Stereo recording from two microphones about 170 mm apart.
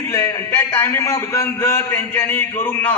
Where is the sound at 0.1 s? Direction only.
15° left (ahead or behind).